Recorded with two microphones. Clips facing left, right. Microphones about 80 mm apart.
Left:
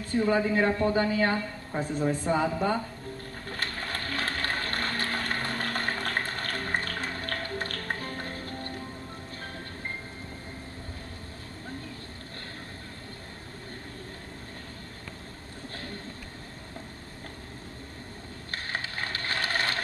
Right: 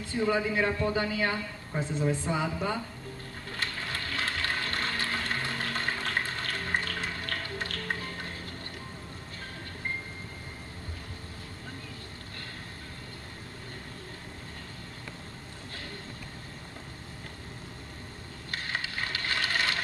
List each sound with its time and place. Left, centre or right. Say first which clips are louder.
0.0 s a woman's voice: left 3 dB; left
3.4 s a sound: left 1 dB; left
18.5 s ratchet: even; left